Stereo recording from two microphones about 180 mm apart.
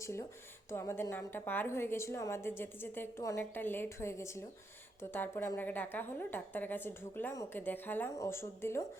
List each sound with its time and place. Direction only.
0.0 s a woman's voice: 15° left (ahead or behind)